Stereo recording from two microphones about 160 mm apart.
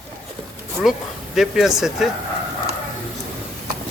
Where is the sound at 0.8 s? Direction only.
Centre (ahead or behind).